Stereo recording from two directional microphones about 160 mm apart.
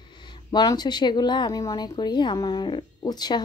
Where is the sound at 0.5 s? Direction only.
25° left (ahead or behind).